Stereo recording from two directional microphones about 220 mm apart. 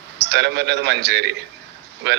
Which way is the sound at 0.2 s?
55° right (ahead or behind).